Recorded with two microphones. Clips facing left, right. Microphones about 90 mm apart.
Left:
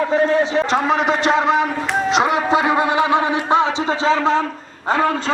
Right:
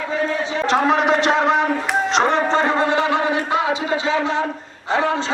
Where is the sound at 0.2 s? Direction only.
40° left (ahead or behind).